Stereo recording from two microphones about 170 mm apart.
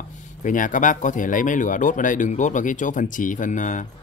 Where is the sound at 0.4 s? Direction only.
50° left (ahead or behind).